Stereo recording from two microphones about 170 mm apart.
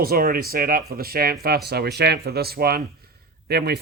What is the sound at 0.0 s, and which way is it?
Speech, 65° right (ahead or behind).